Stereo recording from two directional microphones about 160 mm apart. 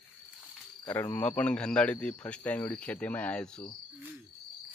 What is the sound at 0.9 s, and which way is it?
Speech, 15° left (ahead or behind).